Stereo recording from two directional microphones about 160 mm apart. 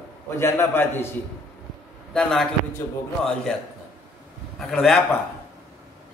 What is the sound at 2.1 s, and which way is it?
Speech, 5° left (ahead or behind).